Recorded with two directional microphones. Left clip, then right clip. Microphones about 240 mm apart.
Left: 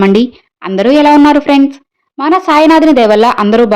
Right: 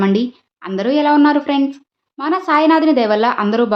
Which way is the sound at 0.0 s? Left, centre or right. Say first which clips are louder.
Left 8 dB; left.